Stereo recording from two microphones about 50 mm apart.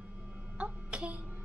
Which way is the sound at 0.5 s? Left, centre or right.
Right.